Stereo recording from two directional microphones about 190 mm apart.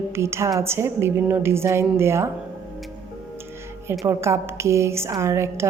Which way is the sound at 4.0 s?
15° right (ahead or behind).